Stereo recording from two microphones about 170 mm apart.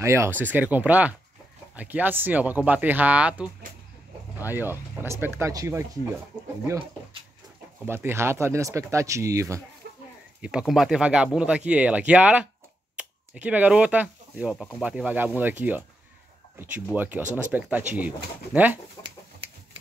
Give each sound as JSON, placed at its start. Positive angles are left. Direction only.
{"t": 0.0, "sound": "speech", "side_deg": -15}
{"t": 7.8, "sound": "speech", "side_deg": -15}
{"t": 9.8, "sound": "a sound", "side_deg": -65}
{"t": 10.4, "sound": "speech", "side_deg": -5}
{"t": 16.9, "sound": "speech", "side_deg": -10}
{"t": 19.0, "sound": "chicken", "side_deg": 25}